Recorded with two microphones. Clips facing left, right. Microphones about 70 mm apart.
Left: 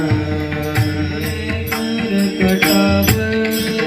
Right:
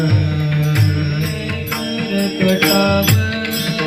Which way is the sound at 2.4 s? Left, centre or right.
Left.